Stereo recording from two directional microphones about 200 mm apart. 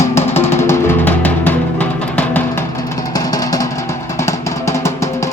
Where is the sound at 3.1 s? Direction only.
20° left (ahead or behind).